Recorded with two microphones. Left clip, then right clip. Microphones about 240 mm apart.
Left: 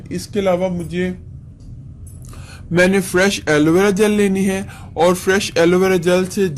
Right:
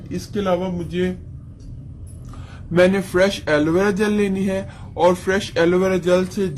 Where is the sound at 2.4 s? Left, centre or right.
Left.